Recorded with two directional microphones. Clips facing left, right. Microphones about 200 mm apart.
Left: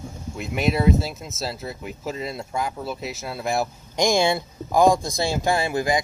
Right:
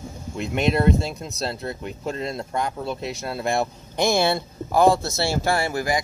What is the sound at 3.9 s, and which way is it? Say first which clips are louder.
Speech: even; 15° left (ahead or behind).